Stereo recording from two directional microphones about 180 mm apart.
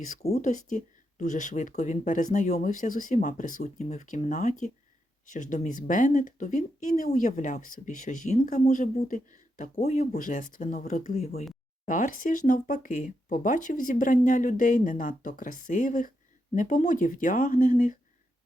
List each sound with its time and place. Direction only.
0.3 s speech: 45° left (ahead or behind)